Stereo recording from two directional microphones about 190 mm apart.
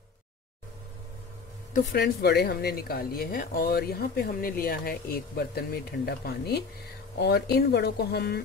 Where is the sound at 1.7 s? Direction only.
55° left (ahead or behind).